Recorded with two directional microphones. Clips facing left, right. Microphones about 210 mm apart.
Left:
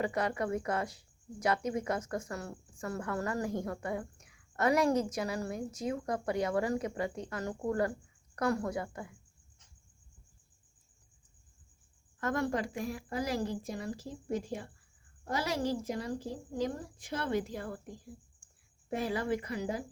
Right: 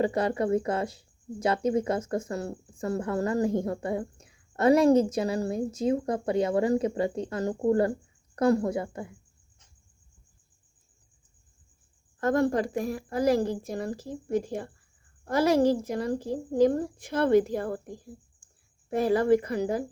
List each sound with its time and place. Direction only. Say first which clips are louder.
0.0 s speech: right 7 dB; 30° right (ahead or behind)
12.2 s a woman's voice: right 8 dB; 40° right (ahead or behind)
18.9 s a woman's voice: right 10 dB; 45° right (ahead or behind)